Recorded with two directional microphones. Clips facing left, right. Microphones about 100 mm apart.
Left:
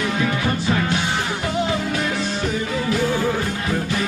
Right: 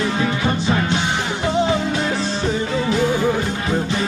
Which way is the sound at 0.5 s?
25° right (ahead or behind).